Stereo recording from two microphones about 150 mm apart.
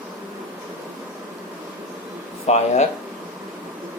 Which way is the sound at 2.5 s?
50° left (ahead or behind).